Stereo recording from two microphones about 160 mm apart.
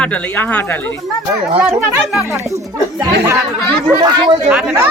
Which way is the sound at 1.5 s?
5° right (ahead or behind).